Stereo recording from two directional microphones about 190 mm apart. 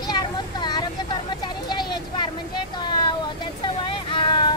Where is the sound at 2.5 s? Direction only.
25° left (ahead or behind).